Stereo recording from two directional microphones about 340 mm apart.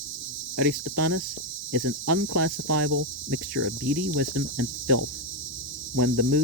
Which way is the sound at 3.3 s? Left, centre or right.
Right.